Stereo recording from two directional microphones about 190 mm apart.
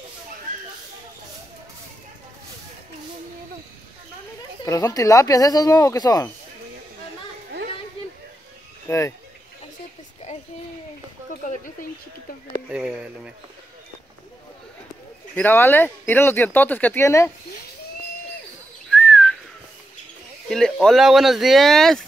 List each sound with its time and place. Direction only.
4.6 s speech: 20° left (ahead or behind)
8.8 s speech: 15° left (ahead or behind)
12.6 s speech: 5° right (ahead or behind)
15.3 s speech: 10° left (ahead or behind)
18.9 s whistling: 5° left (ahead or behind)
20.4 s speech: centre (ahead or behind)